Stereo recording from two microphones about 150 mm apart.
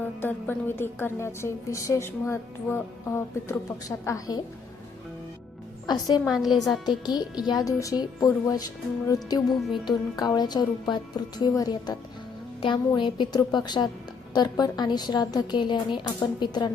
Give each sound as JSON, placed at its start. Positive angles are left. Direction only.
{"t": 0.2, "sound": "a woman's voice", "side_deg": 15}
{"t": 5.8, "sound": "a woman's voice", "side_deg": 25}
{"t": 6.2, "sound": "a woman's voice", "side_deg": 0}
{"t": 7.0, "sound": "a woman's voice", "side_deg": 25}